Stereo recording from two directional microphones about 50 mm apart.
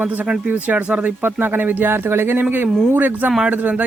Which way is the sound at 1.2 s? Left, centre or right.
Right.